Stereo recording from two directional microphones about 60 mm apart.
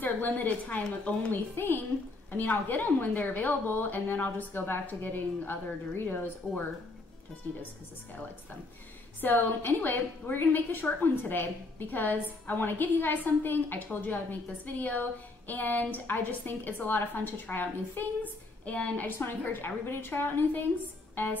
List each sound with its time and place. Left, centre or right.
0.0 s a woman's voice: left
1.5 s a woman's voice: left
7.5 s a woman's voice: left
9.2 s a woman's voice: left
21.1 s music: left